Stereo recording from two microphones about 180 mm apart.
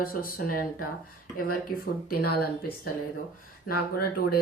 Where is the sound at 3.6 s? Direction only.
60° left (ahead or behind).